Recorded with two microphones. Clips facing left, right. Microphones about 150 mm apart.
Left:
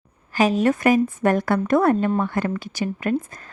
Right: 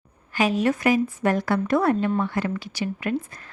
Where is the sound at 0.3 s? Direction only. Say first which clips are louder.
Left 3 dB; 45° left (ahead or behind).